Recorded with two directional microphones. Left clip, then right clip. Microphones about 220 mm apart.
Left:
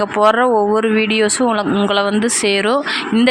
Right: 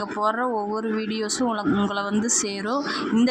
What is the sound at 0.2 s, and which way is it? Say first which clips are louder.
Speech: left 12 dB; 25° left (ahead or behind).